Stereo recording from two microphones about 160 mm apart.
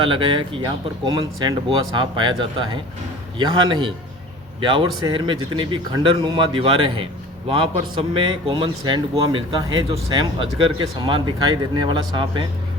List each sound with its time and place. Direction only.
0.0 s a man's voice: 30° right (ahead or behind)